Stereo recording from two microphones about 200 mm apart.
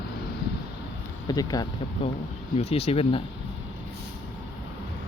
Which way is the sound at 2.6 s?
30° left (ahead or behind).